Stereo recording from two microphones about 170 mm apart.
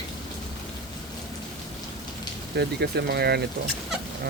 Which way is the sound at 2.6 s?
75° right (ahead or behind).